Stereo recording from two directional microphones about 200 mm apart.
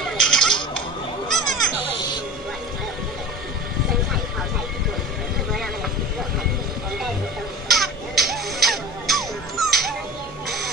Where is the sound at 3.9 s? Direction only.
Centre (ahead or behind).